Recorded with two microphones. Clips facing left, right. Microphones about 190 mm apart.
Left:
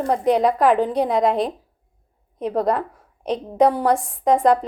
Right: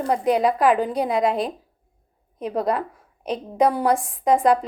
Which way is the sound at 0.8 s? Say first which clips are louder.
Left 2 dB; 5° right (ahead or behind).